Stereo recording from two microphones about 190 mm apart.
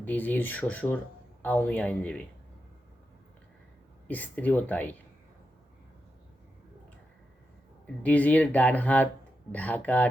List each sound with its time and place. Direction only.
0.0 s speech: 10° left (ahead or behind)
4.1 s speech: 10° left (ahead or behind)
8.0 s speech: 10° left (ahead or behind)